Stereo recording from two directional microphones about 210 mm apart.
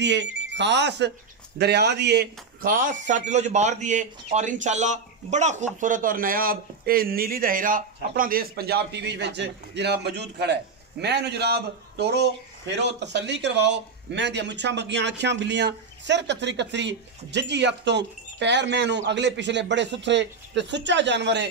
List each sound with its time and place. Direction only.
0.0 s a man's voice: 55° right (ahead or behind)